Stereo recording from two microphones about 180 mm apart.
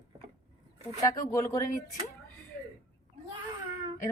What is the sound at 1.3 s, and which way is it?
Speech, 15° left (ahead or behind).